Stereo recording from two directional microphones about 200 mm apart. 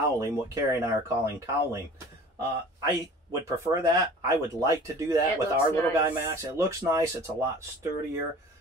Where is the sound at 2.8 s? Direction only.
15° right (ahead or behind).